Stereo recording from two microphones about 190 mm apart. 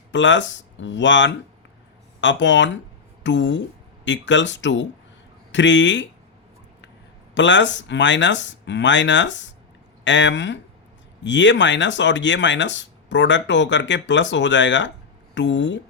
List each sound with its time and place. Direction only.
0.1 s speech: 75° left (ahead or behind)
7.3 s speech: 70° left (ahead or behind)